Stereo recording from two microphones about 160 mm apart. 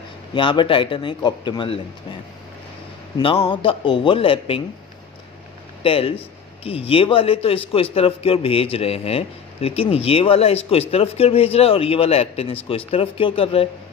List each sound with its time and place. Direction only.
0.3 s a man's voice: 30° left (ahead or behind)
3.2 s a man's voice: 35° left (ahead or behind)
5.8 s a man's voice: 35° left (ahead or behind)